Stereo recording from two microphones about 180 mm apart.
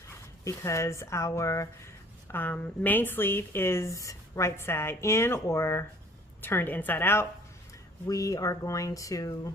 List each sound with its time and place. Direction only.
0.4 s a woman's voice: 15° left (ahead or behind)